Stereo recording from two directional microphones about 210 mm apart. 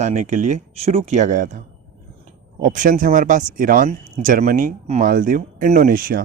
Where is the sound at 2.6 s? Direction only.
40° right (ahead or behind).